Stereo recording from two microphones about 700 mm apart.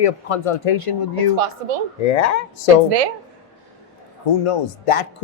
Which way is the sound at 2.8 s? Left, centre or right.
Right.